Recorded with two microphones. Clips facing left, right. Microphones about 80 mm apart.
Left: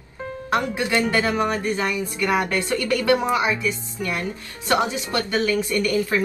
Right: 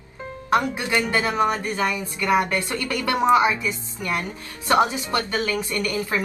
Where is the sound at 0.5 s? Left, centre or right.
Right.